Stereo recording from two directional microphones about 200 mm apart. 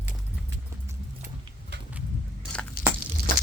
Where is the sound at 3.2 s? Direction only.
55° right (ahead or behind).